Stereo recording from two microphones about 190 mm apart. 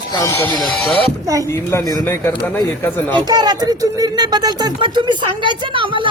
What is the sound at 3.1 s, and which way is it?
Speech, 20° right (ahead or behind).